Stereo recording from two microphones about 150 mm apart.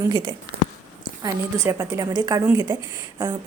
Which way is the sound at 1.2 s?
20° right (ahead or behind).